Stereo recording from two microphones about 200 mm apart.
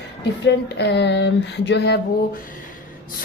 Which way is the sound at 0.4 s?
55° left (ahead or behind).